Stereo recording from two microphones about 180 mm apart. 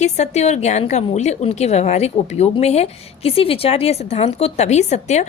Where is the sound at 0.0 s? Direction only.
40° left (ahead or behind).